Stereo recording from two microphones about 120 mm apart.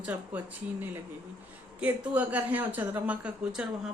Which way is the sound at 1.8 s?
10° right (ahead or behind).